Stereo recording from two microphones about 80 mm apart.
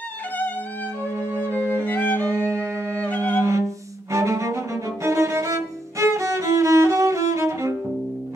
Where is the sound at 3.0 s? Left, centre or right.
Centre.